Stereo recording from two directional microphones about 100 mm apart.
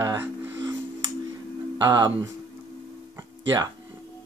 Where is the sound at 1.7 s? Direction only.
45° right (ahead or behind).